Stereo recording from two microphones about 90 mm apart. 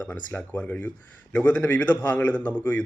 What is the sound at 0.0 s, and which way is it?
A man's voice, 15° left (ahead or behind).